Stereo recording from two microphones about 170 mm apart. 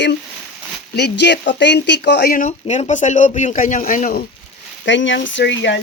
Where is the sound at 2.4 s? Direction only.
45° left (ahead or behind).